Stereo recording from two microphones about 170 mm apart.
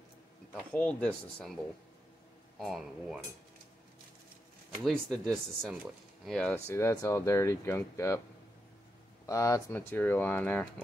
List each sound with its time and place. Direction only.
0.6 s speech: 5° left (ahead or behind)
2.6 s speech: centre (ahead or behind)
4.8 s speech: 5° left (ahead or behind)
9.2 s speech: 20° left (ahead or behind)